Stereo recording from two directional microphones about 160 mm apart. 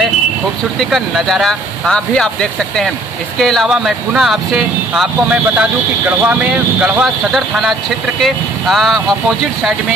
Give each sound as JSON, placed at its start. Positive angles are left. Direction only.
{"t": 0.7, "sound": "speech", "side_deg": 0}
{"t": 3.3, "sound": "speech", "side_deg": 0}